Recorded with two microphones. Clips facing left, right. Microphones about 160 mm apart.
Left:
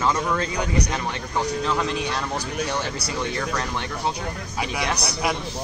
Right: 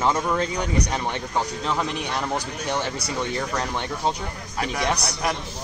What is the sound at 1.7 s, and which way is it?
Speech, 20° right (ahead or behind).